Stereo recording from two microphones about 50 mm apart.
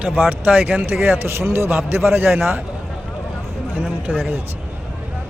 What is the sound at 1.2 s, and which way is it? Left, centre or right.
A man's voice, right.